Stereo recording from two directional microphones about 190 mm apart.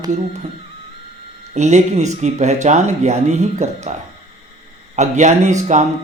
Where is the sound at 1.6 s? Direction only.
35° right (ahead or behind).